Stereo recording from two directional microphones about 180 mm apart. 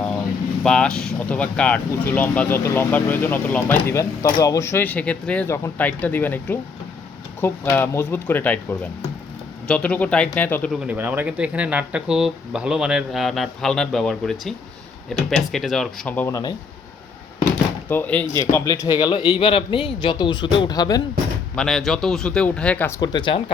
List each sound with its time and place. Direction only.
0.6 s speech: 5° left (ahead or behind)
10.8 s speech: 10° right (ahead or behind); by 16.3 s 10° left (ahead or behind)
16.3 s speech: 20° left (ahead or behind)
17.8 s speech: 10° left (ahead or behind)
21.5 s speech: centre (ahead or behind)
23.0 s speech: 25° left (ahead or behind)